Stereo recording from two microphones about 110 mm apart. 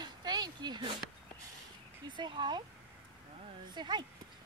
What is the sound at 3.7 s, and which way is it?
Speech, 40° right (ahead or behind).